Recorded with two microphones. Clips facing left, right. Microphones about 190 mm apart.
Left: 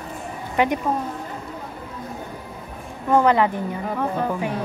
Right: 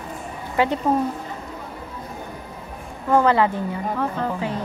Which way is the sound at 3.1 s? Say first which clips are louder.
Even; 15° left (ahead or behind).